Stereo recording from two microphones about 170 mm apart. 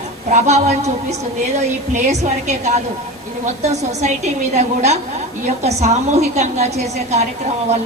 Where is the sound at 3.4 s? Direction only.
40° right (ahead or behind).